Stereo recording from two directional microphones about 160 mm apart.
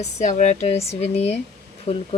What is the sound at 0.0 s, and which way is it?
Speech, 45° left (ahead or behind).